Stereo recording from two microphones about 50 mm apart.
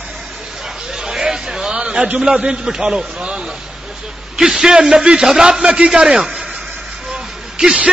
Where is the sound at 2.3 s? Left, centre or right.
Centre.